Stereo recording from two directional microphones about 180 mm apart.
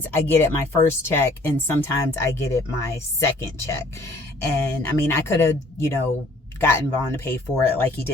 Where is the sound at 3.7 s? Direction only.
15° left (ahead or behind).